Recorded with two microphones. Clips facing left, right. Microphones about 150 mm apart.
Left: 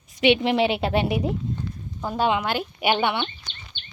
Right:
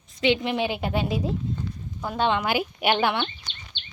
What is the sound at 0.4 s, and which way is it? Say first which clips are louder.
Speech: left 5 dB; 90° left.